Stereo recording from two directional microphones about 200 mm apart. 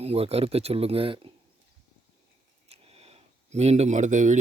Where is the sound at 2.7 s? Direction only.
30° right (ahead or behind).